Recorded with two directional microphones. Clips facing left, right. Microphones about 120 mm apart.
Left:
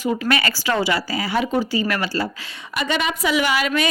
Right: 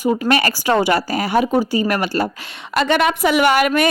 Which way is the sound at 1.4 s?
40° right (ahead or behind).